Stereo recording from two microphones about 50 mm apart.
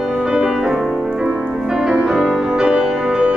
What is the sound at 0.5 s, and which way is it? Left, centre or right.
Music, centre.